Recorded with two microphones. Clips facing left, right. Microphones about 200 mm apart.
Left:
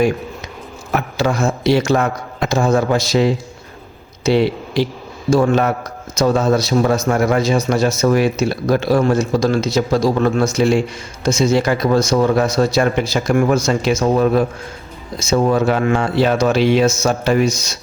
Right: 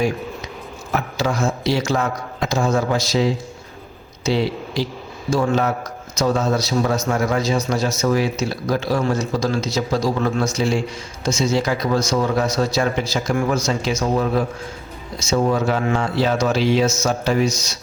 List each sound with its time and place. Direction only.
0.9 s speech: 60° left (ahead or behind)